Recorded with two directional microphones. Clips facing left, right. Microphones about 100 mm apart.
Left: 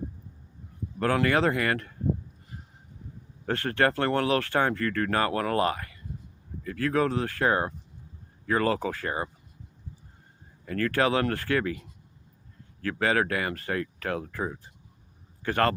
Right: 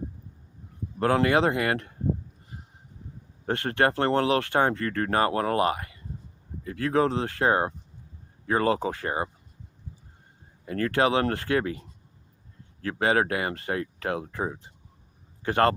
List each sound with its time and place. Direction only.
0.9 s speech: 30° right (ahead or behind)
3.5 s speech: 20° right (ahead or behind)
10.7 s speech: 30° right (ahead or behind)